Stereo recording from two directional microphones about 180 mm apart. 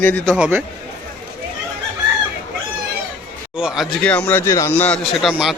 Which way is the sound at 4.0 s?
10° left (ahead or behind).